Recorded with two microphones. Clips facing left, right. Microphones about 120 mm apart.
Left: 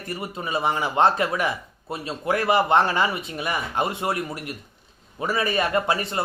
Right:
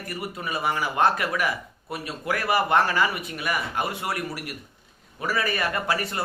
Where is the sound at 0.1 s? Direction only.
25° left (ahead or behind).